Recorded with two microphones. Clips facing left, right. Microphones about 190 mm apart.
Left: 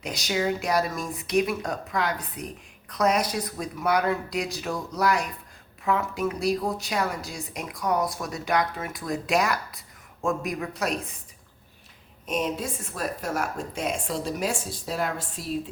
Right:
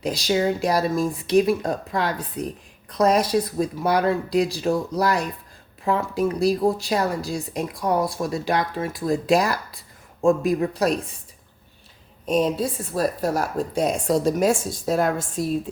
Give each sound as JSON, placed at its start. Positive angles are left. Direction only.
{"t": 0.0, "sound": "a woman's voice", "side_deg": -35}
{"t": 12.2, "sound": "a woman's voice", "side_deg": -35}